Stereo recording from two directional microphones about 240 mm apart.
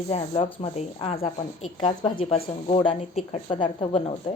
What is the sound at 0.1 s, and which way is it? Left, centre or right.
A woman's voice, left.